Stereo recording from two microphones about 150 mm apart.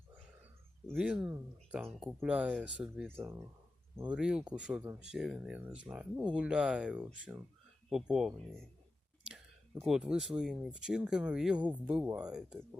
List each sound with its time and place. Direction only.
0.9 s speech: 5° right (ahead or behind)
3.2 s speech: 20° right (ahead or behind)
4.1 s speech: 5° right (ahead or behind)
9.8 s speech: 5° right (ahead or behind)